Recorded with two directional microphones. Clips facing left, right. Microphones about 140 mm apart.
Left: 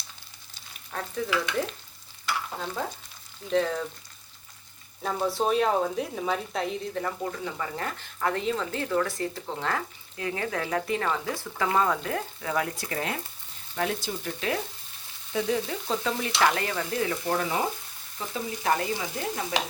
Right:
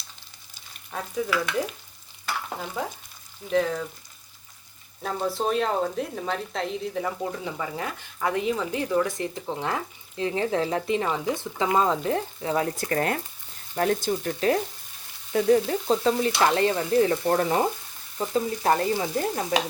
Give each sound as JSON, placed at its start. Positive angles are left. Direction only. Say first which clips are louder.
{"t": 0.9, "sound": "a woman's voice", "louder": "right 2 dB", "side_deg": -10}
{"t": 3.5, "sound": "speech", "louder": "right 1 dB", "side_deg": 0}
{"t": 5.0, "sound": "a woman's voice", "louder": "even", "side_deg": 0}
{"t": 12.7, "sound": "frying", "louder": "right 6 dB", "side_deg": -45}